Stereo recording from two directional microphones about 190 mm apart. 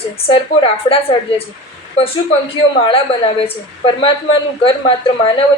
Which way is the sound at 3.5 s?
30° left (ahead or behind).